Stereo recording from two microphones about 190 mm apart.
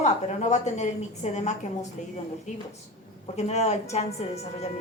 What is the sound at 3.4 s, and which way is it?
Speech, 35° left (ahead or behind).